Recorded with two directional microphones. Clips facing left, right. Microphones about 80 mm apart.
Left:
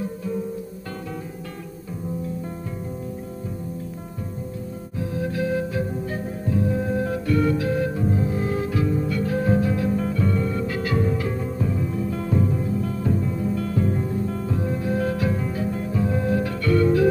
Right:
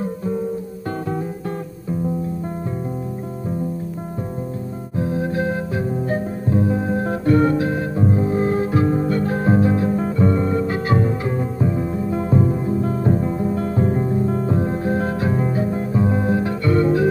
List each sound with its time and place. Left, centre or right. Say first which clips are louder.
4.9 s music: right 5 dB; right